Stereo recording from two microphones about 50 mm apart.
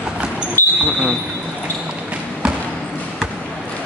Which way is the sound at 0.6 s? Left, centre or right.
Left.